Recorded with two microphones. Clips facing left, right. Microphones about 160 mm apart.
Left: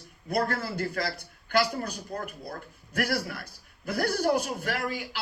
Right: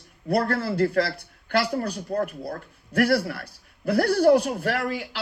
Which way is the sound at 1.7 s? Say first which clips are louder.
Right 8 dB; 35° right (ahead or behind).